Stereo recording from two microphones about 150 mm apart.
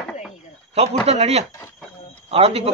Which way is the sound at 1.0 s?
45° right (ahead or behind).